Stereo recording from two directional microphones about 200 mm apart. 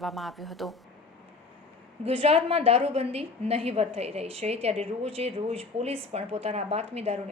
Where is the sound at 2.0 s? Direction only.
30° right (ahead or behind).